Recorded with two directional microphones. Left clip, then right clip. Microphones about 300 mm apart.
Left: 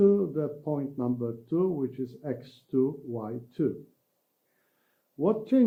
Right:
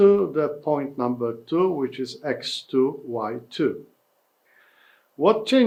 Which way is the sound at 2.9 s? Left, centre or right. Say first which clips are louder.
Right 8 dB; right.